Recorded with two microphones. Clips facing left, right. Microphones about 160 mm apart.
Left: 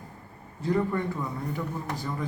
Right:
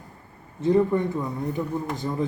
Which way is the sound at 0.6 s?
20° right (ahead or behind).